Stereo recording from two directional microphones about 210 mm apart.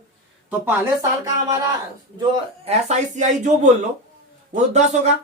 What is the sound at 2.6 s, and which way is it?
Speech, 35° right (ahead or behind).